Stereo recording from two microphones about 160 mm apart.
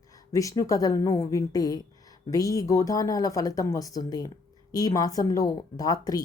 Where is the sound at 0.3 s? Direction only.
20° left (ahead or behind).